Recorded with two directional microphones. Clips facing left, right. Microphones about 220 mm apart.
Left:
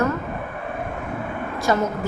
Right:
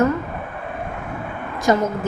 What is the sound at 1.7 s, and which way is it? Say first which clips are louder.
Speech: right 3 dB; 20° right (ahead or behind).